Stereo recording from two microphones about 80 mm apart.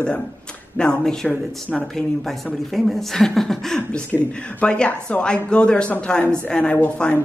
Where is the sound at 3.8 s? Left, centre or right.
Left.